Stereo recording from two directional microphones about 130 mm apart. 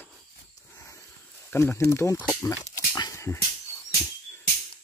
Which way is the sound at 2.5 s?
30° left (ahead or behind).